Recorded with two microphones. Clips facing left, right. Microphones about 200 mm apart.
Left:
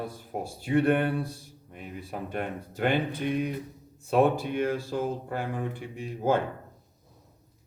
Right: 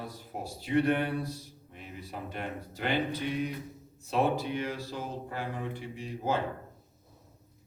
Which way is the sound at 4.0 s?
50° left (ahead or behind).